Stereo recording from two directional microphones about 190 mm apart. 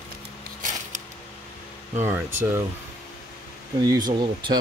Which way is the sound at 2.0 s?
10° right (ahead or behind).